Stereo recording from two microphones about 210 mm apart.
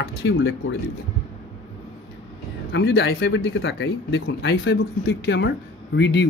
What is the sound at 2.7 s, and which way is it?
Speech, 50° left (ahead or behind).